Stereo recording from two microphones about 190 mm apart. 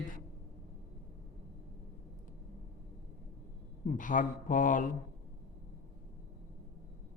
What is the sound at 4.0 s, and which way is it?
Speech, 45° left (ahead or behind).